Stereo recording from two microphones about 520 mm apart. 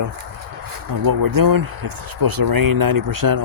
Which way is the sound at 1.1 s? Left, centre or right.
Right.